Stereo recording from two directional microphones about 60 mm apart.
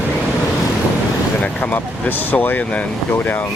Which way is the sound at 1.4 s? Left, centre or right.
Left.